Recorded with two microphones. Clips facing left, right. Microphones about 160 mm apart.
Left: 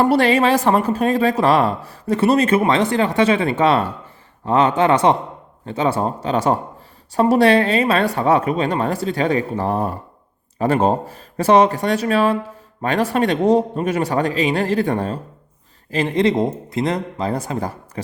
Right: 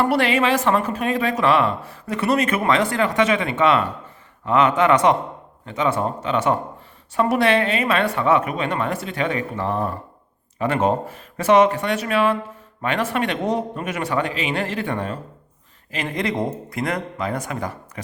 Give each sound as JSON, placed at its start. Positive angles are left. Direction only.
{"t": 0.0, "sound": "speech", "side_deg": 35}